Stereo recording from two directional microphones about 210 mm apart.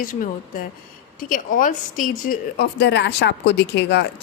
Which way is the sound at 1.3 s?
40° left (ahead or behind).